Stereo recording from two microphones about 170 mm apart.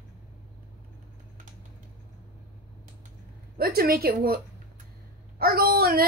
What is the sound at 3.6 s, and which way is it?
A woman's voice, 60° right (ahead or behind).